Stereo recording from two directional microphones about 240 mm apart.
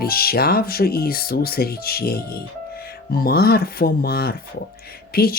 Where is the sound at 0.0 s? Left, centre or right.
Left.